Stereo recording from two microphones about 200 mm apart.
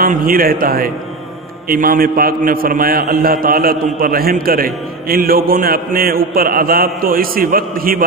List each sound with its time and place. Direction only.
0.0 s a man's voice: 45° right (ahead or behind)